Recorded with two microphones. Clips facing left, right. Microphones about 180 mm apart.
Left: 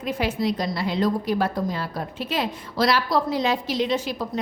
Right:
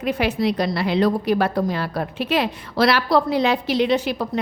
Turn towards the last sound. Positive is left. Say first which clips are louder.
# right 5 dB
turn(degrees=-65)  # may be behind; listen again after turning